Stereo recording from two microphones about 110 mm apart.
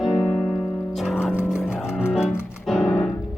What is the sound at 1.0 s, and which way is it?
Music, 5° right (ahead or behind).